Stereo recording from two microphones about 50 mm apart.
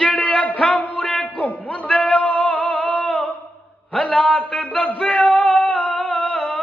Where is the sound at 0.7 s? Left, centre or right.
Left.